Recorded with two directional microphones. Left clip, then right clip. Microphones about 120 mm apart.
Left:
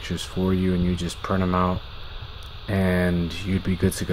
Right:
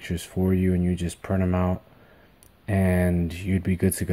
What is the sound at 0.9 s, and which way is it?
Speech, 20° right (ahead or behind).